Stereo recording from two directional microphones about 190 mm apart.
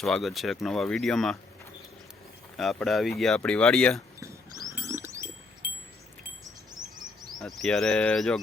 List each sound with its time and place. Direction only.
0.0 s speech: centre (ahead or behind)
2.6 s speech: centre (ahead or behind)
4.2 s a sound: 15° right (ahead or behind)
6.4 s chirp: 20° right (ahead or behind)
7.3 s speech: centre (ahead or behind)